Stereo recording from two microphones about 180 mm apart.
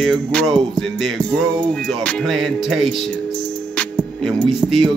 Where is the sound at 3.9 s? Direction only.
Centre (ahead or behind).